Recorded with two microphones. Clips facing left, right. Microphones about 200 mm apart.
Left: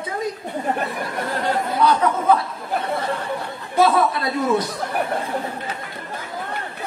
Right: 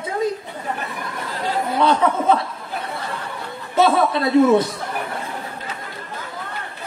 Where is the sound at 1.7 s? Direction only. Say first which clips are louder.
Right 2 dB; 25° right (ahead or behind).